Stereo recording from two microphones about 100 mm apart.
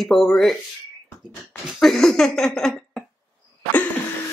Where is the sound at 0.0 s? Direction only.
Centre (ahead or behind).